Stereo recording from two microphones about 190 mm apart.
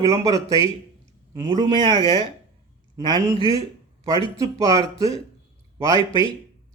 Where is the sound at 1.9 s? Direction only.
20° left (ahead or behind).